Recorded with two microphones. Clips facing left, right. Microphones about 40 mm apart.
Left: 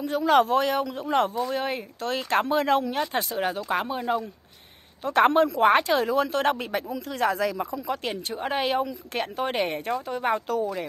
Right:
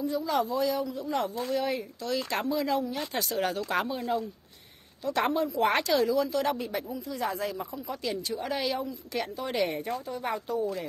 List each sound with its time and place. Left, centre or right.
0.0 s speech: left
3.3 s speech: centre
3.9 s speech: left
5.6 s speech: left
6.2 s speech: left
8.0 s speech: left